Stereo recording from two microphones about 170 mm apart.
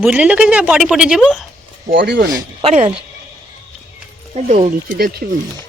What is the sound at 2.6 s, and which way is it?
Speech, 35° right (ahead or behind).